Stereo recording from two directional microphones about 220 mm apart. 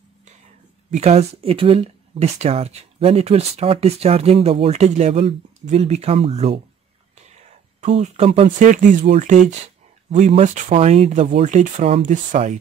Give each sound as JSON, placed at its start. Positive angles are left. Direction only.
{"t": 0.9, "sound": "speech", "side_deg": -30}
{"t": 7.8, "sound": "speech", "side_deg": -30}